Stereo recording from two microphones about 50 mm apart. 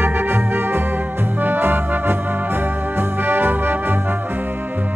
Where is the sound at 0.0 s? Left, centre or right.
Right.